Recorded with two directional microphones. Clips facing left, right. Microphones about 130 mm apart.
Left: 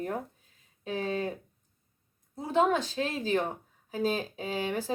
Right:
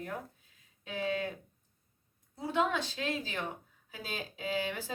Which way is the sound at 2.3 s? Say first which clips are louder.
Left 5 dB; 40° left (ahead or behind).